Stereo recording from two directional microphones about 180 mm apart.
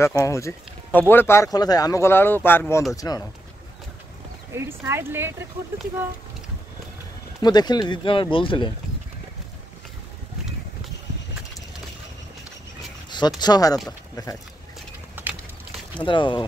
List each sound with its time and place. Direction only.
0.2 s speech: 15° left (ahead or behind)
4.6 s speech: 15° right (ahead or behind)
7.4 s speech: 25° left (ahead or behind)
13.4 s speech: 20° left (ahead or behind)
15.9 s speech: 25° left (ahead or behind)